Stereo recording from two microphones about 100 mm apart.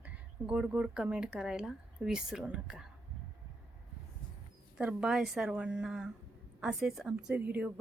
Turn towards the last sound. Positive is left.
turn(degrees=-15)  # may be behind; listen again after turning